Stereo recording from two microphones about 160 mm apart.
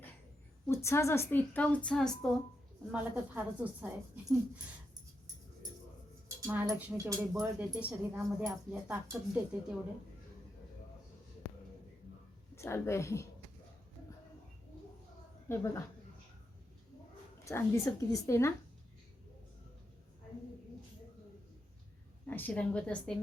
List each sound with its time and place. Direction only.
0.7 s a woman's voice: 15° left (ahead or behind)
2.9 s speech: 10° right (ahead or behind)
6.2 s speech: 15° right (ahead or behind)
12.5 s a woman's voice: 15° left (ahead or behind)
15.4 s a woman's voice: 20° left (ahead or behind)
17.4 s a woman's voice: 15° left (ahead or behind)
22.3 s a woman's voice: 10° left (ahead or behind)